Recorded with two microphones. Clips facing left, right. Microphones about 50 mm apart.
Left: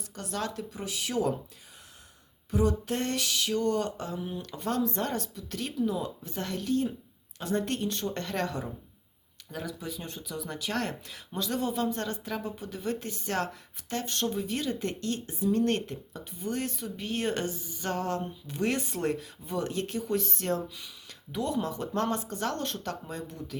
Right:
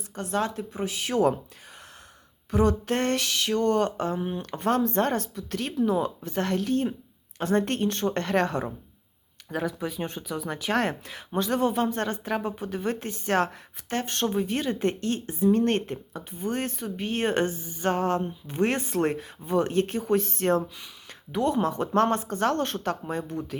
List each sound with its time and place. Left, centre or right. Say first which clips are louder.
0.2 s speech: right 6 dB; right
2.5 s speech: right 4 dB; right